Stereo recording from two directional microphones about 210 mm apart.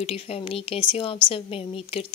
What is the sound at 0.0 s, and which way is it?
A woman's voice, 25° left (ahead or behind).